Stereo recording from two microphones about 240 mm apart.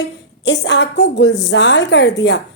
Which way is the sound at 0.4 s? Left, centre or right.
Left.